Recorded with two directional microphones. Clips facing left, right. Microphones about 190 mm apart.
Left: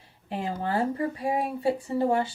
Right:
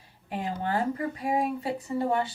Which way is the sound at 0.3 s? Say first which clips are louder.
Left 1 dB; 30° left (ahead or behind).